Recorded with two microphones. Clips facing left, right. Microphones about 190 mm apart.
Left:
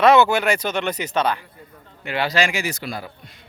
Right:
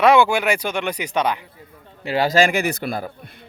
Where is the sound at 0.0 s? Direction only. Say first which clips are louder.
Even; 10° right (ahead or behind).